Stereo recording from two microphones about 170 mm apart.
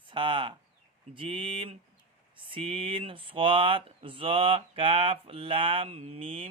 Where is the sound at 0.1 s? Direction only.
30° right (ahead or behind).